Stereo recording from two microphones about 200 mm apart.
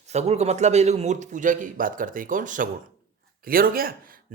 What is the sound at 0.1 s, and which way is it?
A man's voice, 35° right (ahead or behind).